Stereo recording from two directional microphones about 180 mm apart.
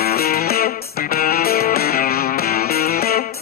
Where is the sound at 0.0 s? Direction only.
55° left (ahead or behind).